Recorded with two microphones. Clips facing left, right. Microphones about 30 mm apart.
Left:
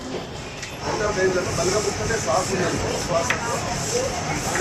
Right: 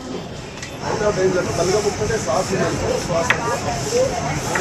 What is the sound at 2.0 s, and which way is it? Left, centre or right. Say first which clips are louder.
Speech: right 3 dB; centre.